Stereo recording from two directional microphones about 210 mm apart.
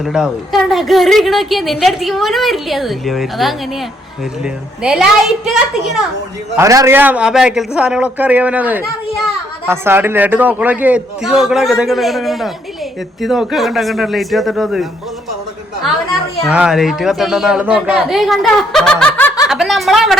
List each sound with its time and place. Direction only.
0.0 s a woman's voice: centre (ahead or behind)
6.6 s a man's voice: 15° right (ahead or behind)
16.5 s a woman's voice: 5° right (ahead or behind)